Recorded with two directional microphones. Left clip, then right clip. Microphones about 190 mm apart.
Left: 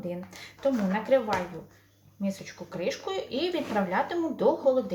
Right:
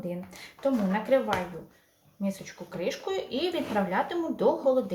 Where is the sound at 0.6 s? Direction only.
Centre (ahead or behind).